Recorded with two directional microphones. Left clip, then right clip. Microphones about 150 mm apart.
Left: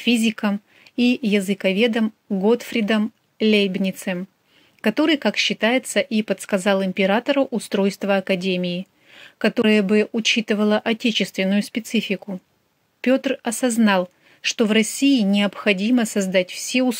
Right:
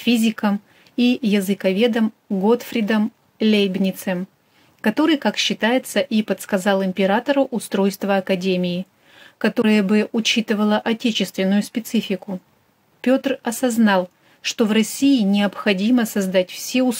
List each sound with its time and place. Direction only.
0.0 s speech: 15° left (ahead or behind)